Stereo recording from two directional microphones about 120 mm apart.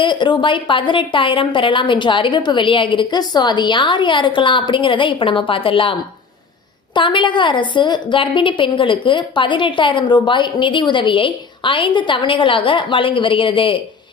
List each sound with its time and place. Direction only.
0.0 s a woman's voice: 40° left (ahead or behind)